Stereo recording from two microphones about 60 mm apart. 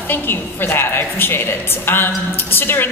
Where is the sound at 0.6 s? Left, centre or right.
Left.